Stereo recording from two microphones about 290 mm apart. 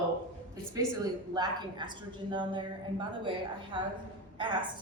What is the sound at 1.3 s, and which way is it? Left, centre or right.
A woman's voice, centre.